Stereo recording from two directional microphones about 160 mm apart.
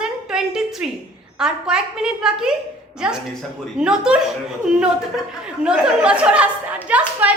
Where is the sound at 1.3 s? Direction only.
5° right (ahead or behind).